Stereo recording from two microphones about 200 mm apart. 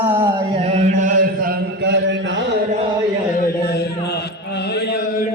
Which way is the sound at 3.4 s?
50° left (ahead or behind).